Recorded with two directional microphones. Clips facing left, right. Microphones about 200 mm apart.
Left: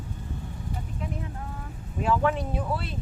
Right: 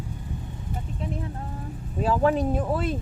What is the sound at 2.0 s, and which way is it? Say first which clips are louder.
Speech: right 3 dB; 35° right (ahead or behind).